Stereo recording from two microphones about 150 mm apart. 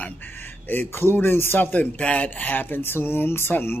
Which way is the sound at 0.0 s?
15° left (ahead or behind).